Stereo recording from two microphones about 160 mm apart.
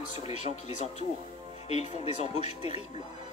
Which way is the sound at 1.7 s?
45° left (ahead or behind).